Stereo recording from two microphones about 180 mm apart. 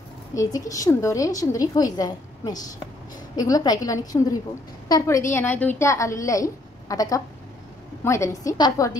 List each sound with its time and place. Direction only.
0.3 s a woman's voice: 20° left (ahead or behind)